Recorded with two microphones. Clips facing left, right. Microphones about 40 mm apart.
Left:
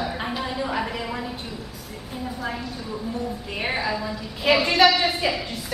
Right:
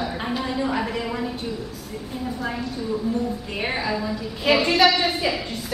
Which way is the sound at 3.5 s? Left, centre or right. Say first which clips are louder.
Even; centre.